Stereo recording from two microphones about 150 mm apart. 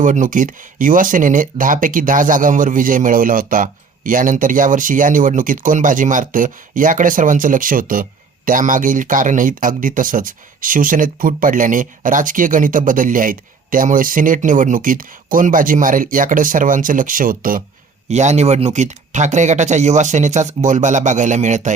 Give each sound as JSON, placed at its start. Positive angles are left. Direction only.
{"t": 0.0, "sound": "speech", "side_deg": -60}
{"t": 18.1, "sound": "speech", "side_deg": -50}